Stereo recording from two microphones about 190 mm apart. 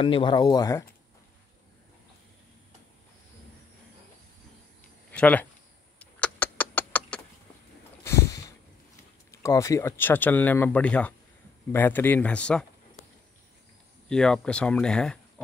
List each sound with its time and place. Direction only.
0.0 s speech: 25° left (ahead or behind)
5.1 s speech: 5° left (ahead or behind)
5.9 s vehicle: 5° left (ahead or behind)
8.0 s a sound: 15° left (ahead or behind)
9.3 s speech: 15° left (ahead or behind)
14.0 s speech: 5° left (ahead or behind)